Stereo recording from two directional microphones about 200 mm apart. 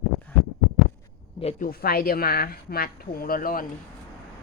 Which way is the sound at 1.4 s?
35° left (ahead or behind).